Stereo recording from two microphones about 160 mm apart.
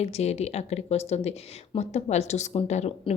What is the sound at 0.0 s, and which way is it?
A woman's voice, 40° left (ahead or behind).